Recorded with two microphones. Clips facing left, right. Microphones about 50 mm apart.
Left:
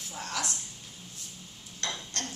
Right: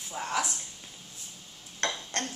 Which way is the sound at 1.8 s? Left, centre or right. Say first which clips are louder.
Right 4 dB; right.